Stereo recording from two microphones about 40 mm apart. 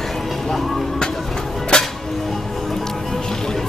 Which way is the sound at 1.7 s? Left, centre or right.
Left.